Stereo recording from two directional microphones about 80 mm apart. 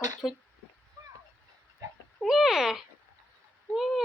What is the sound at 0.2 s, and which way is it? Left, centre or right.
Speech, centre.